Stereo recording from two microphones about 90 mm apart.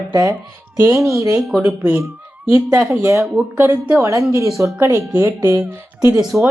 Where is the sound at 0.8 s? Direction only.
35° right (ahead or behind).